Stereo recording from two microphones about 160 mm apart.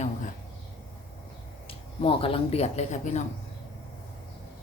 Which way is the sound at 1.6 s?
35° left (ahead or behind).